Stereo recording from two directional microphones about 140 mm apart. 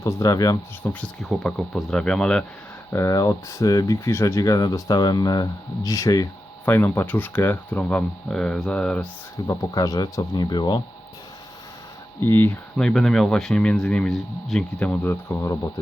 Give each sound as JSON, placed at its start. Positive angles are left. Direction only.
{"t": 0.0, "sound": "speech", "side_deg": 25}
{"t": 0.8, "sound": "speech", "side_deg": 5}
{"t": 2.9, "sound": "speech", "side_deg": 25}
{"t": 9.5, "sound": "speech", "side_deg": 25}
{"t": 12.2, "sound": "speech", "side_deg": 15}
{"t": 12.7, "sound": "speech", "side_deg": 5}